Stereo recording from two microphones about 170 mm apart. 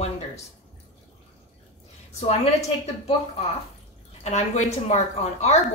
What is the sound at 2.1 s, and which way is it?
Speech, 40° left (ahead or behind).